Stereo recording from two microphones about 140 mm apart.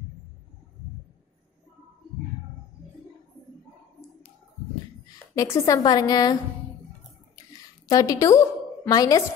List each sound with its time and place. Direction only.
5.3 s a woman's voice: 25° left (ahead or behind)
7.5 s a woman's voice: 25° left (ahead or behind)